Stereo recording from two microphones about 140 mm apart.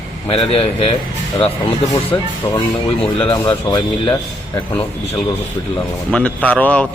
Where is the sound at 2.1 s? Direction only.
35° left (ahead or behind).